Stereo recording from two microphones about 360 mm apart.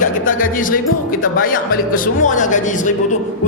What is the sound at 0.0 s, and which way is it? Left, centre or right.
Music, left.